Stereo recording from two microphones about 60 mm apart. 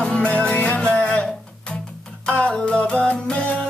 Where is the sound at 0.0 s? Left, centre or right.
Centre.